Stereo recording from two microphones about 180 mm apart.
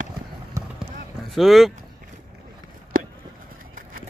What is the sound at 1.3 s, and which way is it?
Speech, centre (ahead or behind).